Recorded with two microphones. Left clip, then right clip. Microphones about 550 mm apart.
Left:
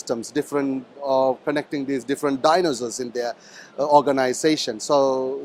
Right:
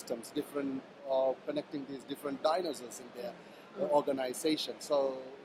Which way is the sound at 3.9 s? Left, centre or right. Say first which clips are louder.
Left 14 dB; left.